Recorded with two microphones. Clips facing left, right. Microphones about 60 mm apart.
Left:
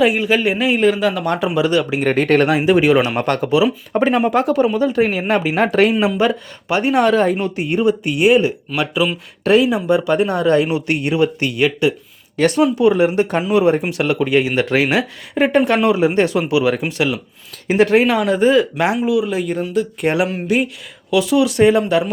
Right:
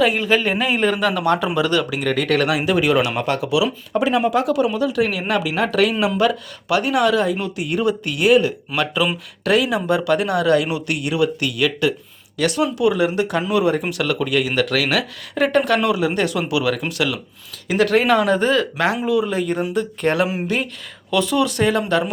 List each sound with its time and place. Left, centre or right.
0.0 s speech: centre
2.0 s speech: left
3.2 s speech: left
3.5 s speech: left; by 9.0 s centre
9.4 s speech: left
18.0 s speech: centre
18.9 s speech: centre